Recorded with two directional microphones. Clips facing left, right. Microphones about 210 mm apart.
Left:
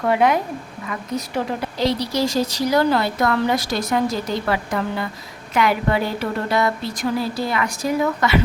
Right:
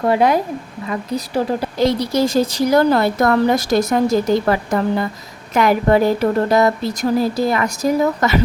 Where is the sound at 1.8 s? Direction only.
50° right (ahead or behind).